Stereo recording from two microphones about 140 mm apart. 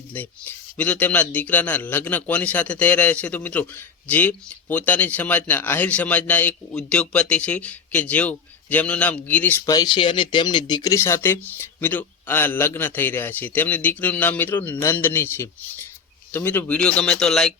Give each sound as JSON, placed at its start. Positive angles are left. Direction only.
{"t": 0.1, "sound": "a man's voice", "side_deg": 15}
{"t": 9.6, "sound": "a man's voice", "side_deg": 30}